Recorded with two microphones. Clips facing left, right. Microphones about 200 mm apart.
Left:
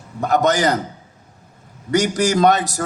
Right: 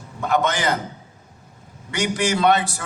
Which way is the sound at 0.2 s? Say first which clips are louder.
Left 5 dB; 40° left (ahead or behind).